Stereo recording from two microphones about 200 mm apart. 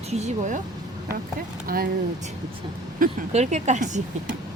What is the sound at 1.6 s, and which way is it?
Speech, 50° right (ahead or behind).